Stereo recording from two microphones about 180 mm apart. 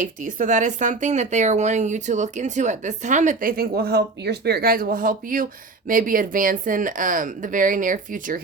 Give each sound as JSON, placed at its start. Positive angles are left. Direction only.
{"t": 0.0, "sound": "speech", "side_deg": -45}